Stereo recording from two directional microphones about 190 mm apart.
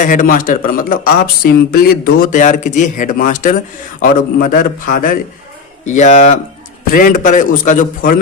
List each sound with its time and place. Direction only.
0.0 s speech: 45° left (ahead or behind)